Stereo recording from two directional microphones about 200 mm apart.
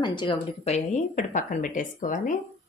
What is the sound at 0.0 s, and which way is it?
A woman's voice, 25° left (ahead or behind).